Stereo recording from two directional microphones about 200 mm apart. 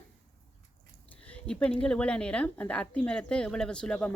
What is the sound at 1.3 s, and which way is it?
Speech, 5° left (ahead or behind).